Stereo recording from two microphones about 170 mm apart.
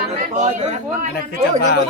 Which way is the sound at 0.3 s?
40° right (ahead or behind).